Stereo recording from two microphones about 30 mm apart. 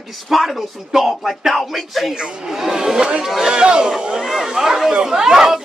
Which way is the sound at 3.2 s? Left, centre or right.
Centre.